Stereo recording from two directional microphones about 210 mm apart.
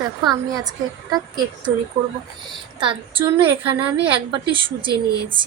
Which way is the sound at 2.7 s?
25° right (ahead or behind).